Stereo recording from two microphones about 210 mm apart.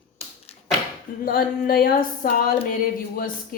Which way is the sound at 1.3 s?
45° left (ahead or behind).